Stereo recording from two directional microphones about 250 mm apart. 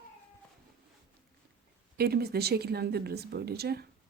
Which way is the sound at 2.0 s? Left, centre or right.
Right.